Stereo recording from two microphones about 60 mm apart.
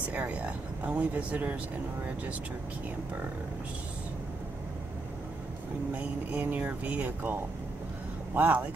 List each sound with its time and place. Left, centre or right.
0.1 s speech: right
5.9 s speech: right
8.4 s speech: right